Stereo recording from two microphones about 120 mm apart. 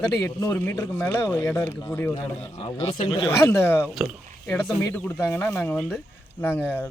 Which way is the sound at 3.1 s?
50° left (ahead or behind).